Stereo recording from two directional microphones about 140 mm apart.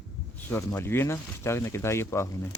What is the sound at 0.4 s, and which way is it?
Speech, 15° left (ahead or behind).